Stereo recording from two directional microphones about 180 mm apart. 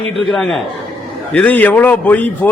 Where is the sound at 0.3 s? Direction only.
Centre (ahead or behind).